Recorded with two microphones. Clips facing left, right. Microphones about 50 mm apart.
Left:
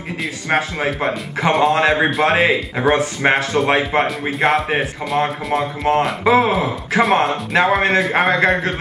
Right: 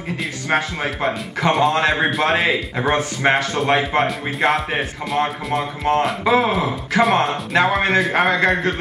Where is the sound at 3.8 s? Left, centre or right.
Centre.